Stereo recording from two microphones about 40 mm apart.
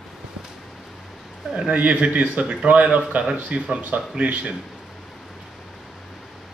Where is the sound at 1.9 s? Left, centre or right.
Right.